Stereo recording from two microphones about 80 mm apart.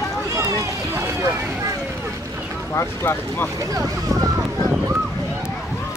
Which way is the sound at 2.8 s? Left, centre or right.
Left.